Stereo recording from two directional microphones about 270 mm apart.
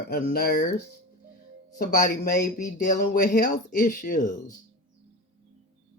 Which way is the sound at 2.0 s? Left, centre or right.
Left.